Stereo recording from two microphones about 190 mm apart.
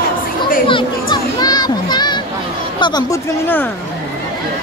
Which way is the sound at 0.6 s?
25° left (ahead or behind).